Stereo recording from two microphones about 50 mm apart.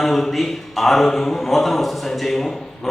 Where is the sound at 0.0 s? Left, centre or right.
Centre.